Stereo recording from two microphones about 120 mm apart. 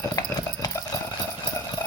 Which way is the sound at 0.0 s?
35° left (ahead or behind).